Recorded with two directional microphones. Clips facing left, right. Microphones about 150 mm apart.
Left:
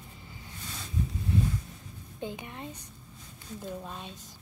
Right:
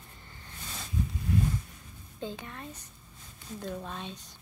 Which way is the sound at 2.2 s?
20° left (ahead or behind).